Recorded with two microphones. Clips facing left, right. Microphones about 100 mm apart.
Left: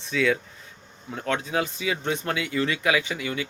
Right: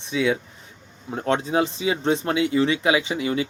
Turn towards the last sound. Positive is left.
turn(degrees=-25)  # may be behind; listen again after turning